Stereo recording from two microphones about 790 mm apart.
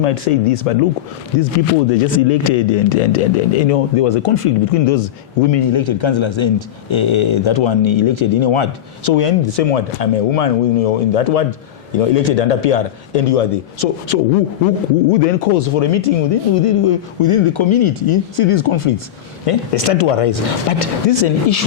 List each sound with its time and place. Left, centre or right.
0.0 s a man's voice: left
15.1 s a man's voice: left